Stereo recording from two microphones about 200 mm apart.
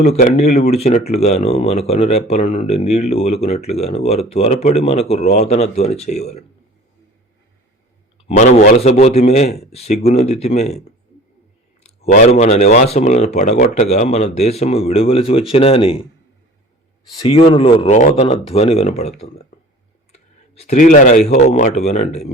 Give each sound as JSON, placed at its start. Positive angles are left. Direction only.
{"t": 0.0, "sound": "speech", "side_deg": 35}
{"t": 8.4, "sound": "speech", "side_deg": 40}
{"t": 17.2, "sound": "speech", "side_deg": 30}
{"t": 20.1, "sound": "a sound", "side_deg": 35}
{"t": 21.2, "sound": "speech", "side_deg": 35}